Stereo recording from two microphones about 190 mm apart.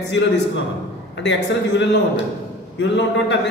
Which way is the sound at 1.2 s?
70° left (ahead or behind).